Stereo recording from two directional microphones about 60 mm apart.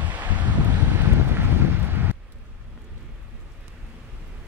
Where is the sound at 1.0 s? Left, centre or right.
Right.